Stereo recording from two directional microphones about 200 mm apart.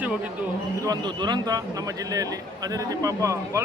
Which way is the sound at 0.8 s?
20° right (ahead or behind).